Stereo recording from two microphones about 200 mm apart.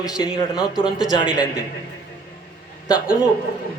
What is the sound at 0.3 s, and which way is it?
Speech, 5° right (ahead or behind).